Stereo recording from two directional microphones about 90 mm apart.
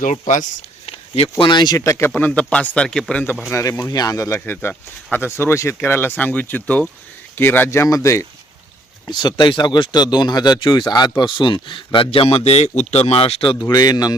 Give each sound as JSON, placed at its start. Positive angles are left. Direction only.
{"t": 0.9, "sound": "speech", "side_deg": 80}
{"t": 1.8, "sound": "speech", "side_deg": 35}
{"t": 2.0, "sound": "speech", "side_deg": 20}
{"t": 3.5, "sound": "speech", "side_deg": 35}
{"t": 4.4, "sound": "speech", "side_deg": 20}
{"t": 9.0, "sound": "speech", "side_deg": 55}
{"t": 13.6, "sound": "speech", "side_deg": 45}